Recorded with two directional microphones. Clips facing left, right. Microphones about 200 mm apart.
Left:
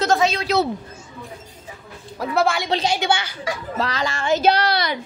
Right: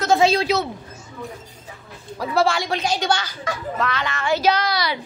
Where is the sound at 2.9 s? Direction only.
10° left (ahead or behind).